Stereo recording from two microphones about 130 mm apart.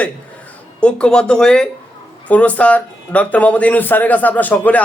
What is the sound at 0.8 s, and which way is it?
A man's voice, 5° left (ahead or behind).